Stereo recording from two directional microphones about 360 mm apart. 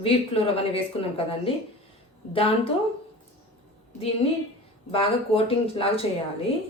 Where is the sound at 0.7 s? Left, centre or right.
Centre.